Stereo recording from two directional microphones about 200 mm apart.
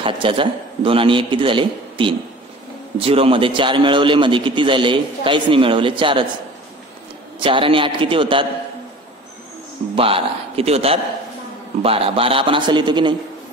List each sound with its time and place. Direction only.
0.0 s a man's voice: 25° right (ahead or behind)
7.3 s a man's voice: 25° right (ahead or behind)
9.9 s a man's voice: 30° right (ahead or behind)